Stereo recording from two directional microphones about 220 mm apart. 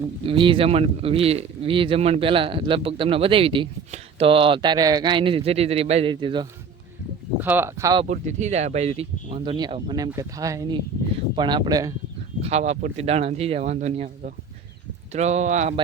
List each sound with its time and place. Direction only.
0.3 s speech: 25° right (ahead or behind)
7.3 s speech: 10° right (ahead or behind)
8.0 s speech: 30° right (ahead or behind); by 11.9 s 15° right (ahead or behind)
12.4 s speech: 30° right (ahead or behind)